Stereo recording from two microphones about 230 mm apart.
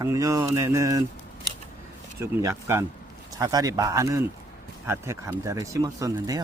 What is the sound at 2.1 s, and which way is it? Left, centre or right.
Speech, centre.